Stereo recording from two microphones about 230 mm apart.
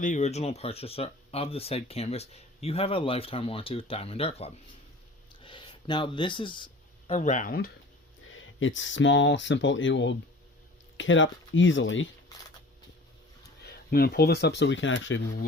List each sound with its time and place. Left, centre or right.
0.0 s speech: left
7.1 s speech: left
8.3 s speech: left
13.7 s speech: left